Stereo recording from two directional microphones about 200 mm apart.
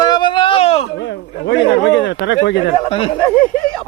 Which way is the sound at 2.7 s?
25° left (ahead or behind).